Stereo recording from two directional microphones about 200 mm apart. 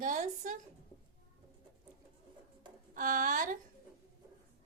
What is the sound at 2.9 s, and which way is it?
Speech, 40° right (ahead or behind).